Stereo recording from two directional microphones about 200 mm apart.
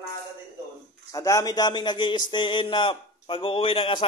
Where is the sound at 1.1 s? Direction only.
15° left (ahead or behind).